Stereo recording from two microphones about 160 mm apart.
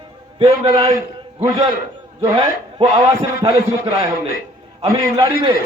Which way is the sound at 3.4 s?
30° right (ahead or behind).